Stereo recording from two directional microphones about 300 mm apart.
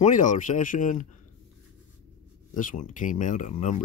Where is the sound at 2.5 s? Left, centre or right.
Left.